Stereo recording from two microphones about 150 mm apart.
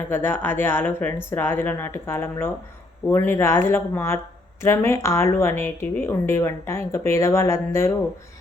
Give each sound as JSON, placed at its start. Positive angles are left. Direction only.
{"t": 0.1, "sound": "a woman's voice", "side_deg": 15}